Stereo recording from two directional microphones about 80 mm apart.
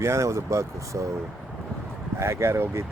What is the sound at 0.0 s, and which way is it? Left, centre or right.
Speech, right.